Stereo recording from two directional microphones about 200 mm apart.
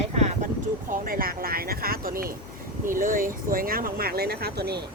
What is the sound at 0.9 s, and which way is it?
Speech, 45° right (ahead or behind).